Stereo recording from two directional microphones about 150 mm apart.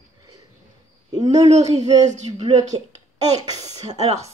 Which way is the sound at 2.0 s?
50° right (ahead or behind).